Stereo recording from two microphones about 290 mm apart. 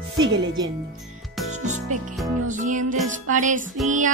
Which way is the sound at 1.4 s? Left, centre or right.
Right.